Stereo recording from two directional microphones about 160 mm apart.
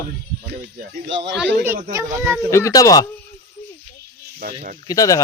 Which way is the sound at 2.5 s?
20° left (ahead or behind).